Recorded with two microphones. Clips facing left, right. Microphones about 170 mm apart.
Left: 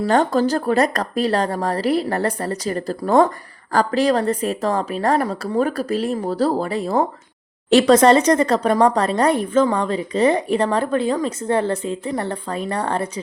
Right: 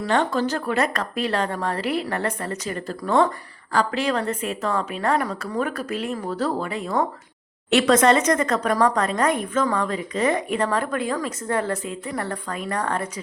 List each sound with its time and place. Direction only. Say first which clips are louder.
0.0 s speech: left 5 dB; 40° left (ahead or behind)